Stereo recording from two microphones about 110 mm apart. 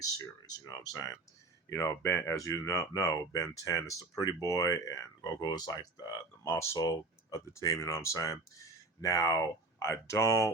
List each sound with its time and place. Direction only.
0.0 s speech: 35° left (ahead or behind)